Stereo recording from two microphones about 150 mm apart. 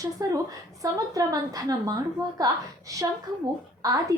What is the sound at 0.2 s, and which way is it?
A woman's voice, 25° right (ahead or behind).